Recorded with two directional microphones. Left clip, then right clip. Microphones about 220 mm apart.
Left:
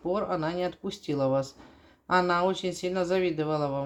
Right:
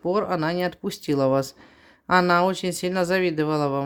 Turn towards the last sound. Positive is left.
turn(degrees=-45)  # may be behind; listen again after turning